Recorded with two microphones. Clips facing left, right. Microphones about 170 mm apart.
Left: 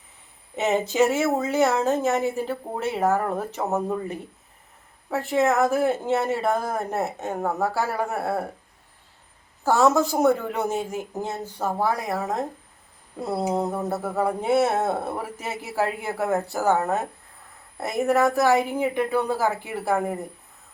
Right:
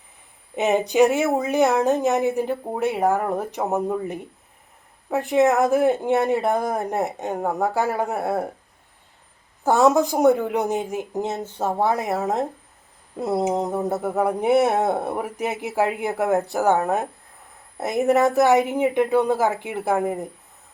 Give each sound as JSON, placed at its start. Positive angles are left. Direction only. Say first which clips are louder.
{"t": 0.5, "sound": "speech", "louder": "right 3 dB", "side_deg": -15}
{"t": 9.6, "sound": "speech", "louder": "right 2 dB", "side_deg": -15}